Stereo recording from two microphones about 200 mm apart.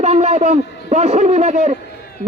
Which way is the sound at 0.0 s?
35° right (ahead or behind).